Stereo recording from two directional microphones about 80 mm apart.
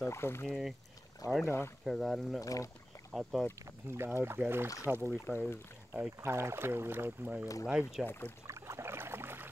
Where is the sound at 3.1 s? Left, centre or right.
Centre.